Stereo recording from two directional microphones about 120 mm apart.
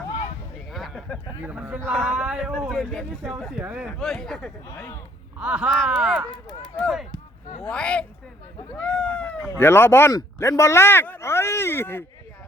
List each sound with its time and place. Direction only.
0.7 s a sound: centre (ahead or behind)
1.5 s speech: 15° right (ahead or behind)
1.8 s a woman's voice: 5° left (ahead or behind)
2.0 s speech: 10° right (ahead or behind)
3.5 s speech: 10° right (ahead or behind)
3.9 s speech: 5° left (ahead or behind)
4.7 s speech: 25° left (ahead or behind)
5.4 s speech: 10° right (ahead or behind)
5.6 s a woman's voice: centre (ahead or behind)
8.8 s a sound: 10° left (ahead or behind)
9.6 s speech: 20° left (ahead or behind)